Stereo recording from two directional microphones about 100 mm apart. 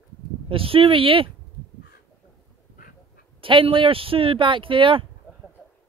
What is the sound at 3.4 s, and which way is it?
Speech, 60° right (ahead or behind).